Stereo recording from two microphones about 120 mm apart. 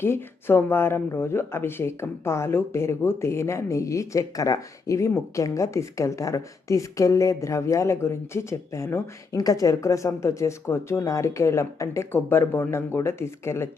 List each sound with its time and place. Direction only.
0.0 s speech: 20° left (ahead or behind)